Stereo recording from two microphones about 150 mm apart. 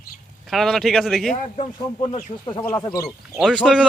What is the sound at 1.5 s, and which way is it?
Speech, 40° left (ahead or behind).